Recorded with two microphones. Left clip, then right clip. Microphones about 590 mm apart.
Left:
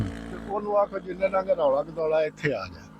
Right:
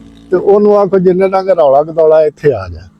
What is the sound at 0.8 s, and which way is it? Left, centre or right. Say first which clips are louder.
Speech: right 16 dB; right.